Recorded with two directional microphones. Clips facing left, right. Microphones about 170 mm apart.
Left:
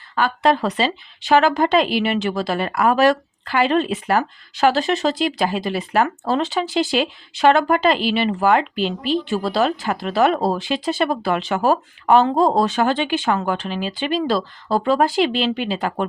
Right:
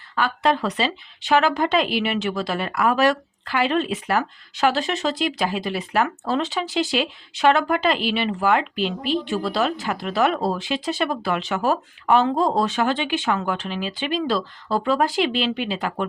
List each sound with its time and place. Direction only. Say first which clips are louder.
0.2 s speech: left 3 dB; 35° left (ahead or behind)